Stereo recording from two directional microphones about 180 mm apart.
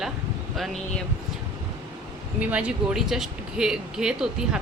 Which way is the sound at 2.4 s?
5° right (ahead or behind).